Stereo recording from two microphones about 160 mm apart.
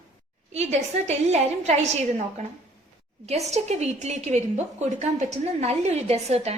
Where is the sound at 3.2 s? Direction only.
45° right (ahead or behind).